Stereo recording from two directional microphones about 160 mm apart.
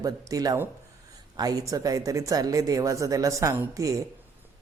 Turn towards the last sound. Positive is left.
turn(degrees=-20)  # may be behind; listen again after turning